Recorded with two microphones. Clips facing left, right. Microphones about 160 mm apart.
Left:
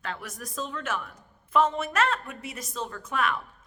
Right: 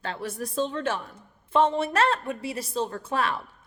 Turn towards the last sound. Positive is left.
turn(degrees=-30)  # may be behind; listen again after turning